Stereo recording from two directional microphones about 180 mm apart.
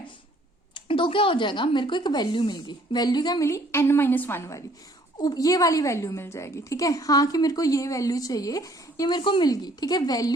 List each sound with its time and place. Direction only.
0.7 s a woman's voice: 30° left (ahead or behind)